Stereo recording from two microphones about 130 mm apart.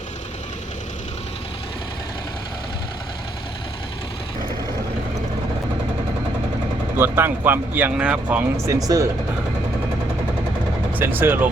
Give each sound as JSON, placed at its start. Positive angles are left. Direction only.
{"t": 6.9, "sound": "speech", "side_deg": -15}
{"t": 8.5, "sound": "speech", "side_deg": -25}
{"t": 10.9, "sound": "speech", "side_deg": -15}